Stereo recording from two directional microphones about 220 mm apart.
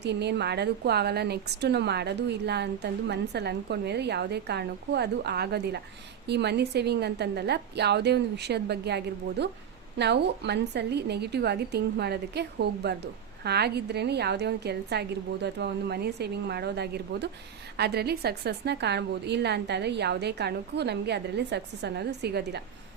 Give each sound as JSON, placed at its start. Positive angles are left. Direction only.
{"t": 0.0, "sound": "a woman's voice", "side_deg": -50}